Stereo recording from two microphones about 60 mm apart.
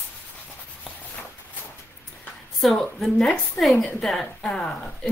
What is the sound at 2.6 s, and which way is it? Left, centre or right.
A woman's voice, centre.